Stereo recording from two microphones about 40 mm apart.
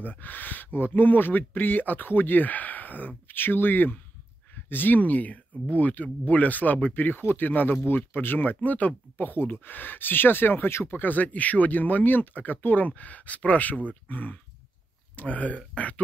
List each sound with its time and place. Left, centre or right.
0.0 s speech: left
7.8 s speech: left
9.3 s speech: left
11.0 s speech: left